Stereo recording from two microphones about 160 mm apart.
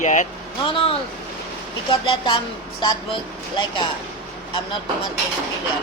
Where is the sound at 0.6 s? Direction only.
35° left (ahead or behind).